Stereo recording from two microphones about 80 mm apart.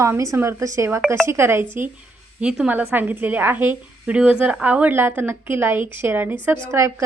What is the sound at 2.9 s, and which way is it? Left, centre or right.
A woman's voice, right.